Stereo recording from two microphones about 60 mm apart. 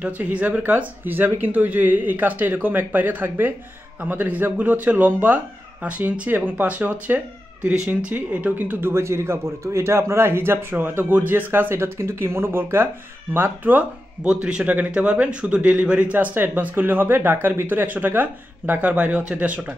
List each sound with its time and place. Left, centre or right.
0.0 s a man's voice: right
8.5 s speech: right
9.0 s a man's voice: right
14.2 s a man's voice: centre